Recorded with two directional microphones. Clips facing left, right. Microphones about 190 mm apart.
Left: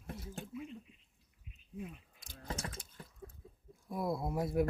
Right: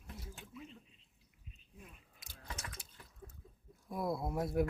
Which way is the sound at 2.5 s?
30° left (ahead or behind).